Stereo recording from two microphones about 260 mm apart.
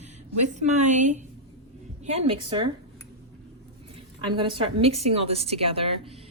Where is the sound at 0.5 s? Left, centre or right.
Right.